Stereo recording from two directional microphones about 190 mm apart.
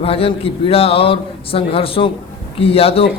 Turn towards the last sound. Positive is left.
turn(degrees=30)  # may be behind; listen again after turning